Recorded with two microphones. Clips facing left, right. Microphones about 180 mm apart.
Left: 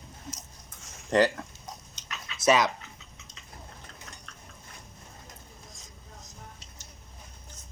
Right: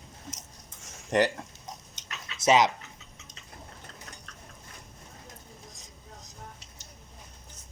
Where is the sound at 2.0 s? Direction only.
45° right (ahead or behind).